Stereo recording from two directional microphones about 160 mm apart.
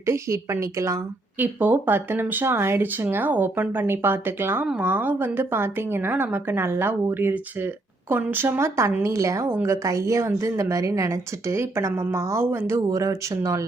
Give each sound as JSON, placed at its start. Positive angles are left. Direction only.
{"t": 0.0, "sound": "a woman's voice", "side_deg": -15}